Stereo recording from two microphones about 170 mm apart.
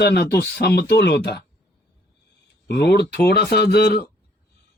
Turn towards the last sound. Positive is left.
turn(degrees=70)  # may be behind; listen again after turning